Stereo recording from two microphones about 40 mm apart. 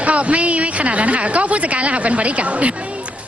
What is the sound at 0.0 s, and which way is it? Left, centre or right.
A woman's voice, right.